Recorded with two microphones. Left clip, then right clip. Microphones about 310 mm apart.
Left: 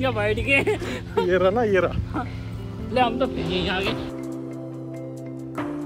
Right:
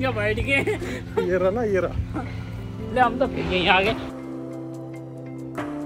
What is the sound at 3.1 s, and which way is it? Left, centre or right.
Speech, centre.